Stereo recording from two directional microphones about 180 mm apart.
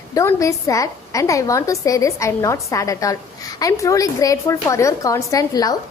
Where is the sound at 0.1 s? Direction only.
15° left (ahead or behind).